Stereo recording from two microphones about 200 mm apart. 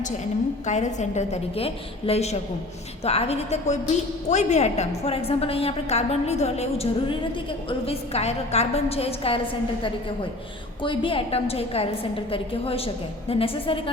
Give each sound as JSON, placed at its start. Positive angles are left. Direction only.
{"t": 0.6, "sound": "a woman's voice", "side_deg": 35}
{"t": 10.8, "sound": "a woman's voice", "side_deg": 25}